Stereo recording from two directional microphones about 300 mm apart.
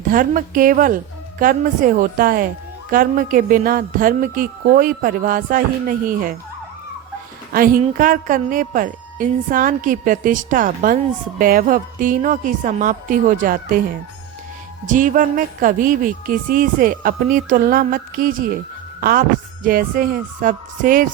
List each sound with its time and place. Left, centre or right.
0.1 s a woman's voice: right
7.5 s a woman's voice: right